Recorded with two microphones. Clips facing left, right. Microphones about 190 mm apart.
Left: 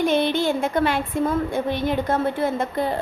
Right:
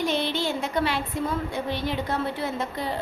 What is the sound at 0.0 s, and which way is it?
A woman's voice, 55° left (ahead or behind).